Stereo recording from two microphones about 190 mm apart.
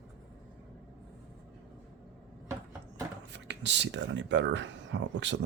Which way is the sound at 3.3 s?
70° right (ahead or behind).